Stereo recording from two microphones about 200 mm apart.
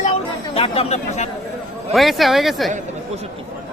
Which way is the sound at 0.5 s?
30° left (ahead or behind).